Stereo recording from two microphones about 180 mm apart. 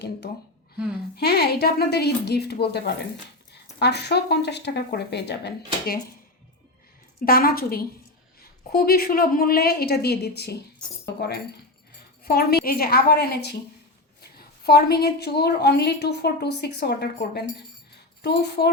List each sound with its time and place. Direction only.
1.1 s a woman's voice: 60° left (ahead or behind)
7.3 s a woman's voice: 55° left (ahead or behind)